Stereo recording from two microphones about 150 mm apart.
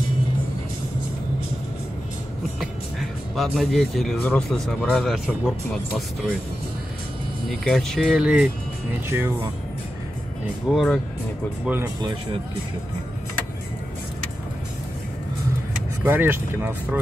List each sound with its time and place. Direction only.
2.6 s music: centre (ahead or behind)
4.2 s speech: 5° left (ahead or behind)
7.4 s speech: centre (ahead or behind); by 9.5 s 15° right (ahead or behind)
10.7 s speech: centre (ahead or behind)
11.6 s speech: 15° right (ahead or behind)
16.0 s speech: 15° right (ahead or behind)